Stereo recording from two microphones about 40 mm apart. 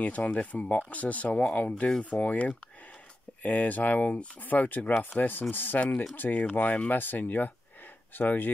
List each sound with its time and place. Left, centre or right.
0.0 s speech: left
3.4 s speech: left
5.8 s speech: left
6.1 s speech: left
6.4 s speech: left
7.0 s speech: left